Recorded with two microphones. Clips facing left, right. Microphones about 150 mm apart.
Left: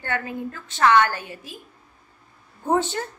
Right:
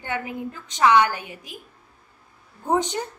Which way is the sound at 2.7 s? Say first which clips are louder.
Left 1 dB; 15° right (ahead or behind).